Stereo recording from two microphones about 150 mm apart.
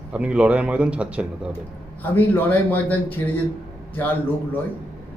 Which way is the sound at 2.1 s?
10° left (ahead or behind).